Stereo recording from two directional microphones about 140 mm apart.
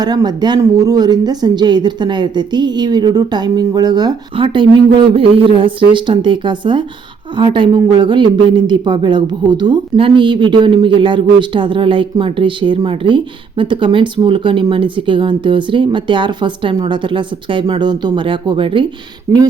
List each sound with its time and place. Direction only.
0.0 s speech: 30° right (ahead or behind)